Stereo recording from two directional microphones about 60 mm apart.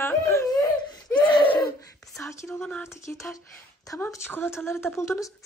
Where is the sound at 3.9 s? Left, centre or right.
Left.